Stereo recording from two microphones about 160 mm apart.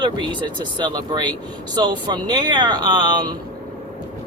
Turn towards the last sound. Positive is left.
turn(degrees=-30)  # may be behind; listen again after turning